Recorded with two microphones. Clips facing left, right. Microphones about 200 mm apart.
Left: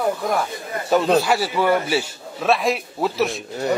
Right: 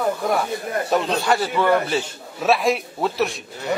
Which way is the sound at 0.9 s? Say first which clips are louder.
Left 4 dB; centre (ahead or behind).